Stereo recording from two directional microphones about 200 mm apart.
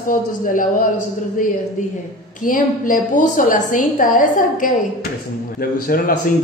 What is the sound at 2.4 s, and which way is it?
A woman's voice, 45° left (ahead or behind).